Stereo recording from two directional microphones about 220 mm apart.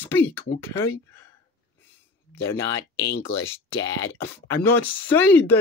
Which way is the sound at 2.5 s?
55° left (ahead or behind).